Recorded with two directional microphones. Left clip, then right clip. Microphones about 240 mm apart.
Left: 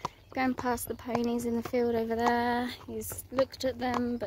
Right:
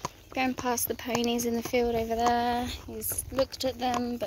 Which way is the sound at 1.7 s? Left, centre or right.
Centre.